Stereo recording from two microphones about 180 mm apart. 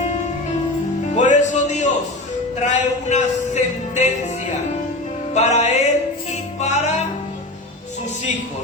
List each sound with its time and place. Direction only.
1.1 s music: 45° left (ahead or behind)
2.6 s speech: 40° left (ahead or behind)
5.3 s music: 40° left (ahead or behind)